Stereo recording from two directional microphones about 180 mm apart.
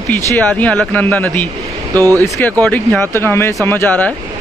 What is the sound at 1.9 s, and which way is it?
Speech, 20° right (ahead or behind).